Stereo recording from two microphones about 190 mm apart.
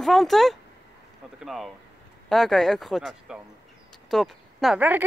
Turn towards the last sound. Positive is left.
turn(degrees=-5)  # may be behind; listen again after turning